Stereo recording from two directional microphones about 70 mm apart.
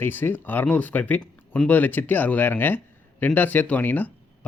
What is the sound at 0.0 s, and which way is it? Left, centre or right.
Speech, left.